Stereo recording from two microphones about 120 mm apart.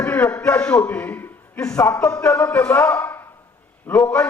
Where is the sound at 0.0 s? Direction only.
10° left (ahead or behind).